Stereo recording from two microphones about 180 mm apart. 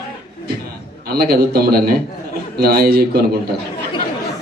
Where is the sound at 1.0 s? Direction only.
60° right (ahead or behind).